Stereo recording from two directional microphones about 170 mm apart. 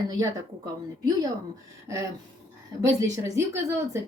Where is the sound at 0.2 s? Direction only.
20° right (ahead or behind).